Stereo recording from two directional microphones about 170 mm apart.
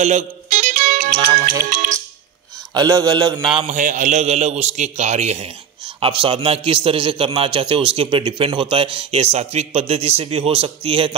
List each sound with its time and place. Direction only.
0.0 s music: 45° right (ahead or behind)
2.7 s a man's voice: 25° right (ahead or behind)
3.7 s a man's voice: 50° right (ahead or behind); by 11.1 s 35° right (ahead or behind)